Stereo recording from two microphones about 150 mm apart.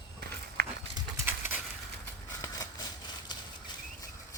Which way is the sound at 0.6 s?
90° right.